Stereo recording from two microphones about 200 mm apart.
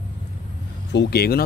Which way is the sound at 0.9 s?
50° left (ahead or behind).